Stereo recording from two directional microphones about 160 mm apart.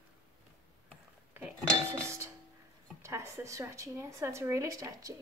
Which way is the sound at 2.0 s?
15° right (ahead or behind).